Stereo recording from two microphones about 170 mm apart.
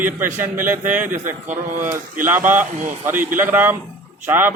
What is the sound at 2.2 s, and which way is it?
Speech, 10° right (ahead or behind).